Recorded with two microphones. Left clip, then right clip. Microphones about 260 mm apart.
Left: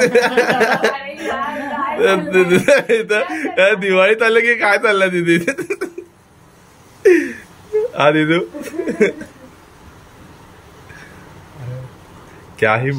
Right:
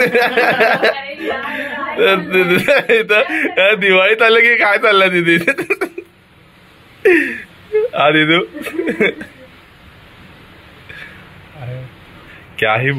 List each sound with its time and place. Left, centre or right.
0.0 s a woman's voice: centre
7.0 s a woman's voice: centre
12.5 s speech: centre